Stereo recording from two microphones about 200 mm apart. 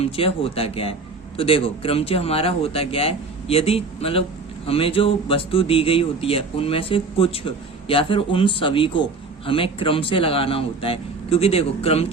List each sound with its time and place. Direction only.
0.0 s speech: 30° left (ahead or behind)